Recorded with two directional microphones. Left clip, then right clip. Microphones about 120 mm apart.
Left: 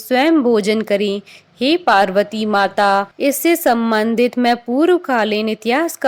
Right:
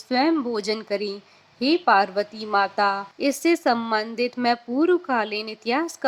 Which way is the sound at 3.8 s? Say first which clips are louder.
Left 9 dB; 30° left (ahead or behind).